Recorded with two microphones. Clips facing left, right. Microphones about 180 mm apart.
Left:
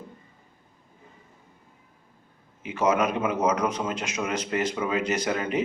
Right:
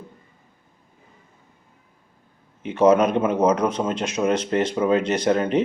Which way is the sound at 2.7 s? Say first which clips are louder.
Right 7 dB; 30° right (ahead or behind).